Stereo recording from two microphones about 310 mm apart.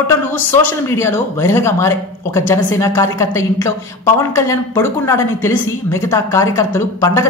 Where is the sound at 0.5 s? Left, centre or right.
Centre.